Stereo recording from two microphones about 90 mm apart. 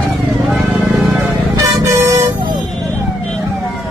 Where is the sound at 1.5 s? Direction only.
40° right (ahead or behind).